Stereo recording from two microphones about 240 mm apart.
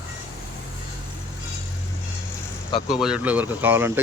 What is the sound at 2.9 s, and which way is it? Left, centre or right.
Speech, centre.